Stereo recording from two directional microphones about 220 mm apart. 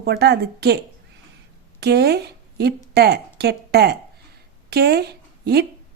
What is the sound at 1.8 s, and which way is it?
Speech, 50° right (ahead or behind).